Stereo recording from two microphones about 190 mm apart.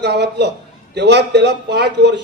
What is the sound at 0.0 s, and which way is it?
A man's voice, 65° right (ahead or behind).